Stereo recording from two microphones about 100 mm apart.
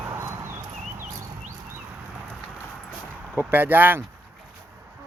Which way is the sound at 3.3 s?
20° right (ahead or behind).